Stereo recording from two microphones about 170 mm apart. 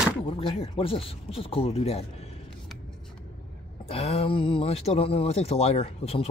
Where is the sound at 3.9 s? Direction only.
35° left (ahead or behind).